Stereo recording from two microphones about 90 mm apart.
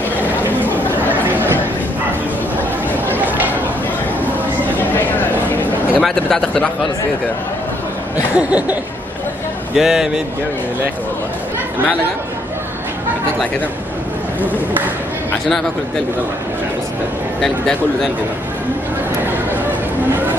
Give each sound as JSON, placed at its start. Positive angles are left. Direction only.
{"t": 1.1, "sound": "a sound", "side_deg": -20}
{"t": 3.2, "sound": "a sound", "side_deg": -20}
{"t": 5.9, "sound": "speech", "side_deg": 10}
{"t": 8.2, "sound": "chuckle", "side_deg": -15}
{"t": 9.8, "sound": "chuckle", "side_deg": -5}
{"t": 17.4, "sound": "speech", "side_deg": 5}